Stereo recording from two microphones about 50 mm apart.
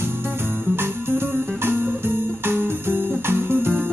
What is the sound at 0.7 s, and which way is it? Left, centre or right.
Music, right.